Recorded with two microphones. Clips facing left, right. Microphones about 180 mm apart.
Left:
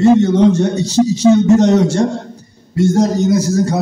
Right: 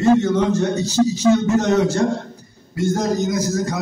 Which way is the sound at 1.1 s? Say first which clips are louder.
Left 9 dB; 75° left (ahead or behind).